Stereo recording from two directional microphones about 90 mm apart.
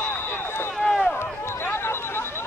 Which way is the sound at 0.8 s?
5° left (ahead or behind).